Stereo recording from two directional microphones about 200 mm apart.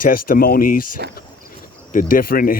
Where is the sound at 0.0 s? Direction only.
45° left (ahead or behind).